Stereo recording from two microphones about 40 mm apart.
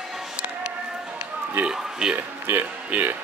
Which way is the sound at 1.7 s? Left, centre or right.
Centre.